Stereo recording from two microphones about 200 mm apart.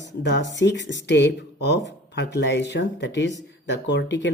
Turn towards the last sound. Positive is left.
turn(degrees=60)  # may be behind; listen again after turning